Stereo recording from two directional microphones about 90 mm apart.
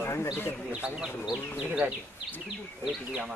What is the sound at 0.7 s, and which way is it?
Speech, 10° right (ahead or behind).